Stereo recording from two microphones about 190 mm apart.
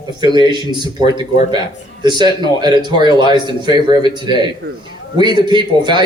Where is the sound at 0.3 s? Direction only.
25° right (ahead or behind).